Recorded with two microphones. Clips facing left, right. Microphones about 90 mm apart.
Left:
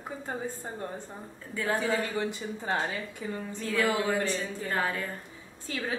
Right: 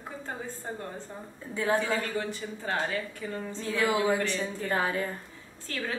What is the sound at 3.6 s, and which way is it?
A woman's voice, 20° right (ahead or behind).